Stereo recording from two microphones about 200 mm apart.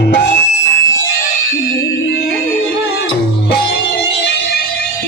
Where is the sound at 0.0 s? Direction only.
65° left (ahead or behind).